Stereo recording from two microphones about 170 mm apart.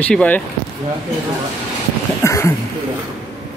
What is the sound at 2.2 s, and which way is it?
Speech, 15° left (ahead or behind).